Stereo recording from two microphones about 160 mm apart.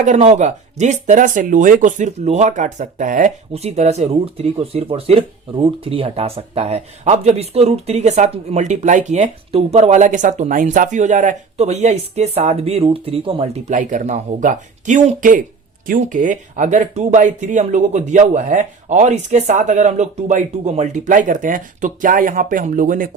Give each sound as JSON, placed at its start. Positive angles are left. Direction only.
{"t": 0.0, "sound": "speech", "side_deg": -50}